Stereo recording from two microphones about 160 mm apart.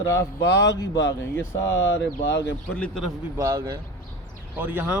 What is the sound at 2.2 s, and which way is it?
Speech, 90° left.